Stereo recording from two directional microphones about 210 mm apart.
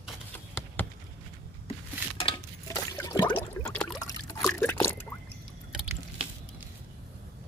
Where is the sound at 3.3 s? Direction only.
5° left (ahead or behind).